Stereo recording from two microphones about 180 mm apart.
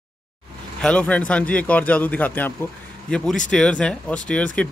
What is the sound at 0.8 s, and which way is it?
Speech, 5° left (ahead or behind).